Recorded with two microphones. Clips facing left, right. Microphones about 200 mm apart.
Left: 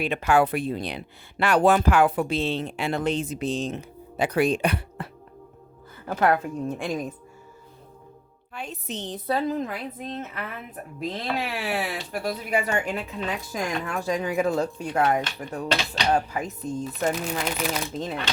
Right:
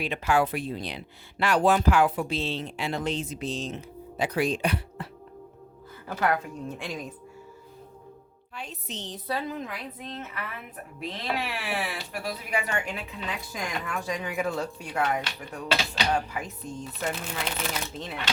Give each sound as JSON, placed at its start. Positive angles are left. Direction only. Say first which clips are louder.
{"t": 0.0, "sound": "speech", "louder": "left 4 dB", "side_deg": 55}
{"t": 6.1, "sound": "a woman's voice", "louder": "left 5 dB", "side_deg": 50}
{"t": 8.5, "sound": "a woman's voice", "louder": "left 5 dB", "side_deg": 50}